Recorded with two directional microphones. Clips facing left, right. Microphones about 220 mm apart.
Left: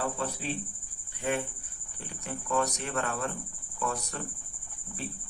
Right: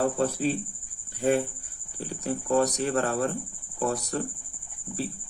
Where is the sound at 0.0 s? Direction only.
40° right (ahead or behind).